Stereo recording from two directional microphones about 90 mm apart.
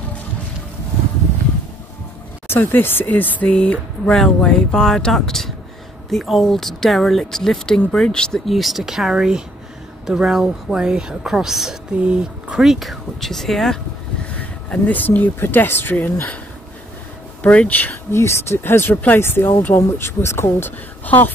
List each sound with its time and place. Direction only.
2.4 s speech: 25° left (ahead or behind); by 13.7 s 5° left (ahead or behind)
14.2 s speech: 15° left (ahead or behind)
17.4 s speech: 15° left (ahead or behind)
18.1 s speech: 30° left (ahead or behind)